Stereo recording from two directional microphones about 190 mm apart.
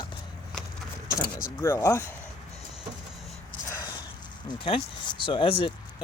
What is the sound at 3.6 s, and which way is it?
Dog, 15° left (ahead or behind).